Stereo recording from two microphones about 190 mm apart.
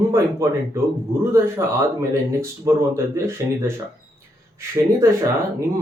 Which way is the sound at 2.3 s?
15° right (ahead or behind).